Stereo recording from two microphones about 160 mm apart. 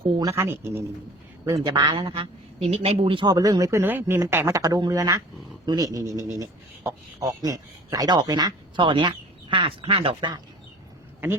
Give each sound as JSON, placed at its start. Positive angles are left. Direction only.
{"t": 0.2, "sound": "a man's voice", "side_deg": -15}